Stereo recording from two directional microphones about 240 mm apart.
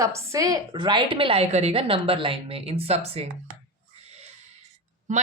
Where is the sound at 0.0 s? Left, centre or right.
Centre.